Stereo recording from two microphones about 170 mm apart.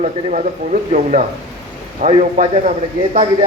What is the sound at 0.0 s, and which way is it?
A man's voice, 45° right (ahead or behind).